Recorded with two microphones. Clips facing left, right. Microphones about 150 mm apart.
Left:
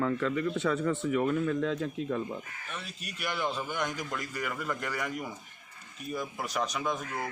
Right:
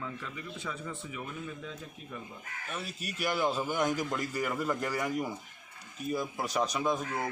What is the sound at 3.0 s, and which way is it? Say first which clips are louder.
Speech: right 3 dB; 5° right (ahead or behind).